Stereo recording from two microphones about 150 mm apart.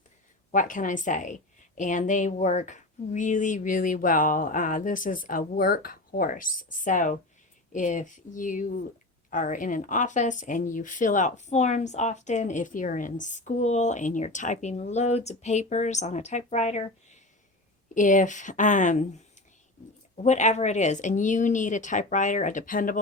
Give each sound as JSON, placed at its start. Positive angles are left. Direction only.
{"t": 0.5, "sound": "a woman's voice", "side_deg": 60}
{"t": 17.9, "sound": "a woman's voice", "side_deg": 60}
{"t": 20.2, "sound": "a woman's voice", "side_deg": 50}